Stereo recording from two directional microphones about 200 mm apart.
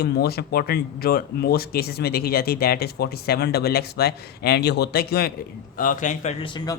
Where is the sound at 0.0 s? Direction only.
50° left (ahead or behind).